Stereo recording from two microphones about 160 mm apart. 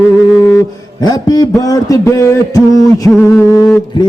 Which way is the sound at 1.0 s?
25° left (ahead or behind).